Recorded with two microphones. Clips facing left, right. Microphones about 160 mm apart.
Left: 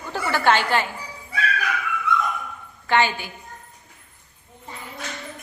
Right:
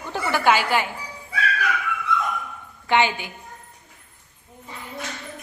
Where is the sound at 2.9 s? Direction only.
15° right (ahead or behind).